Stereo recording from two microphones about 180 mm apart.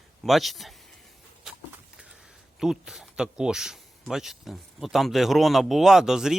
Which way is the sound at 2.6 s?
Centre (ahead or behind).